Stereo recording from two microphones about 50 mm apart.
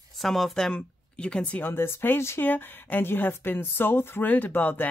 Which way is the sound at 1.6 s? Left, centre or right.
Left.